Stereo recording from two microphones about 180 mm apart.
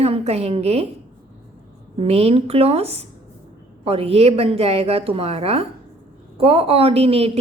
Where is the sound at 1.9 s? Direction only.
35° right (ahead or behind).